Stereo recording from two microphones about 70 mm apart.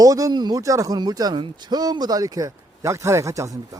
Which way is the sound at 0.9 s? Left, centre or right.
Right.